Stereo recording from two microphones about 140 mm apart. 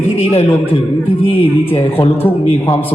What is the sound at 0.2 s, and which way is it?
Speech, 45° left (ahead or behind).